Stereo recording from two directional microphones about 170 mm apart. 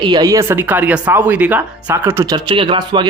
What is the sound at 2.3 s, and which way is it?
Speech, 25° right (ahead or behind).